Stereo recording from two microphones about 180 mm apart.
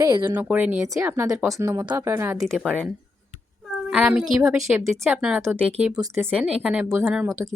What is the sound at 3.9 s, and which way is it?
A woman's voice, 5° right (ahead or behind).